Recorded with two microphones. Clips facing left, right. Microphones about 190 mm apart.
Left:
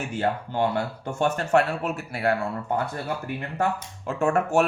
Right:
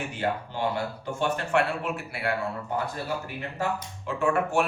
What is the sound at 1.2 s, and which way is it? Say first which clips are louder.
A man's voice: left 4 dB; 40° left (ahead or behind).